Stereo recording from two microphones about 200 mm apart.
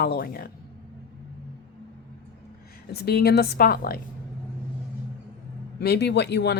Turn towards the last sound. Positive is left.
turn(degrees=55)  # may be behind; listen again after turning